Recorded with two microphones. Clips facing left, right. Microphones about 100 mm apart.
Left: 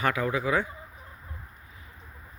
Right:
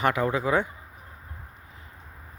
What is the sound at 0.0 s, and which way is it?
Speech, 25° right (ahead or behind).